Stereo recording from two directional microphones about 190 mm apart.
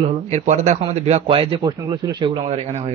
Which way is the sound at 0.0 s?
35° right (ahead or behind).